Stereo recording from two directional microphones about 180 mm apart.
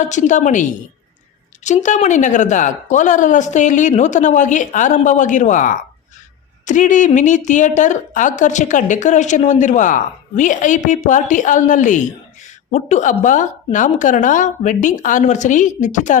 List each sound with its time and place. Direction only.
0.1 s a woman's voice: 45° left (ahead or behind)